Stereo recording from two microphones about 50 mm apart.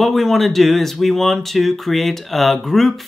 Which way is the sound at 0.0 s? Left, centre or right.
Centre.